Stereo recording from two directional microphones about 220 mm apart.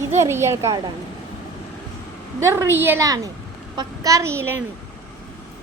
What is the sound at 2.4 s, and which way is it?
A woman's voice, 10° right (ahead or behind).